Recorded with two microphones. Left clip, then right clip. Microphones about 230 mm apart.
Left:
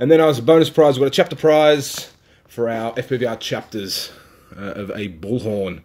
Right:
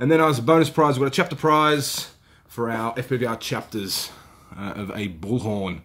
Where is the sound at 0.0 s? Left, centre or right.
Centre.